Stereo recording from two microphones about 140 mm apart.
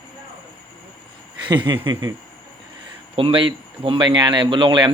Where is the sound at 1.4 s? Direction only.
35° right (ahead or behind).